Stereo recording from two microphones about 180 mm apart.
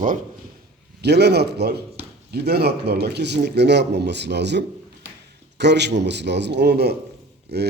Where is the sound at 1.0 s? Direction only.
65° right (ahead or behind).